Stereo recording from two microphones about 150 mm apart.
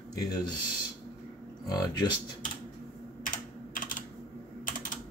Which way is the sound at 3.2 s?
65° left (ahead or behind).